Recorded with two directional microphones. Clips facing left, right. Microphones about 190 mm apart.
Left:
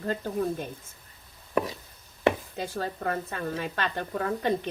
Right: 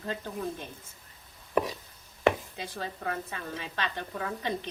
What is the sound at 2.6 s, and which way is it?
A woman's voice, 45° left (ahead or behind).